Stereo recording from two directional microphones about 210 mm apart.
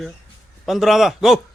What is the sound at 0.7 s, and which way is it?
Speech, centre (ahead or behind).